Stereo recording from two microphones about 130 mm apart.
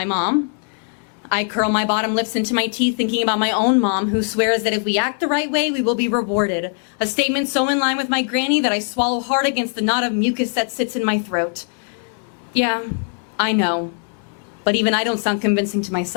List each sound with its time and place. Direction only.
0.0 s a woman's voice: 5° left (ahead or behind)
12.5 s a woman's voice: 5° left (ahead or behind)